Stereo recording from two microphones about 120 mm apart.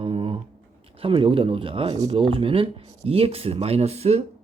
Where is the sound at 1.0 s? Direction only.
45° right (ahead or behind).